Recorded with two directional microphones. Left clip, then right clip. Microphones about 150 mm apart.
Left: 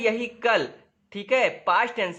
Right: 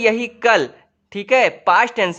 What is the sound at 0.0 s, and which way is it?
A man's voice, 35° right (ahead or behind).